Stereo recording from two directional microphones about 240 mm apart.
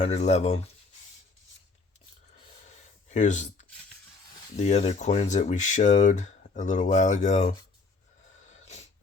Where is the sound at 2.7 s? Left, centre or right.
Left.